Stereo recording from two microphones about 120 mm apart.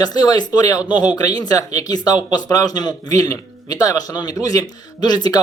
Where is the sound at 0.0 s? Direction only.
35° left (ahead or behind).